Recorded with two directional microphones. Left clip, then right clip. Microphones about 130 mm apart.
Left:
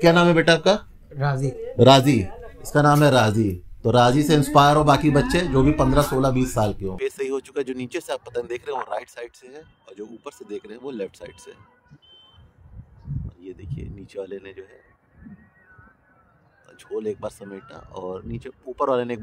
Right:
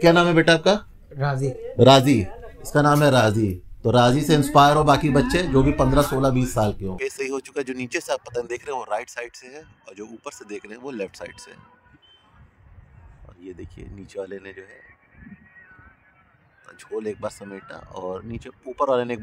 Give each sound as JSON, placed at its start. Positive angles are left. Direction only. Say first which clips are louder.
{"t": 0.0, "sound": "a man's voice", "louder": "even", "side_deg": 0}
{"t": 7.0, "sound": "speech", "louder": "left 3 dB", "side_deg": -35}
{"t": 13.4, "sound": "speech", "louder": "right 3 dB", "side_deg": -45}
{"t": 16.6, "sound": "speech", "louder": "left 1 dB", "side_deg": -40}